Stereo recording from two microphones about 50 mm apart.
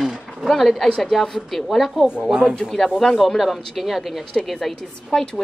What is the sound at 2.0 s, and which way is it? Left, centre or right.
Speech, centre.